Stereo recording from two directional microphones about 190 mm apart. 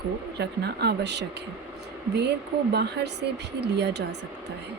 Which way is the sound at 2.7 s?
60° right (ahead or behind).